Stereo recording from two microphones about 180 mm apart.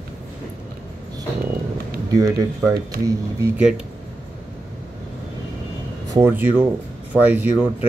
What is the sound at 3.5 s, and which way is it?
Speech, 5° right (ahead or behind).